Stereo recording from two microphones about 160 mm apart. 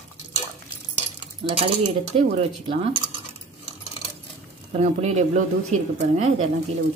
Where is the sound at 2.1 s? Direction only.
35° right (ahead or behind).